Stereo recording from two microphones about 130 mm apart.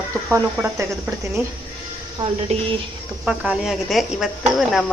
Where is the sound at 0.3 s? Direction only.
20° right (ahead or behind).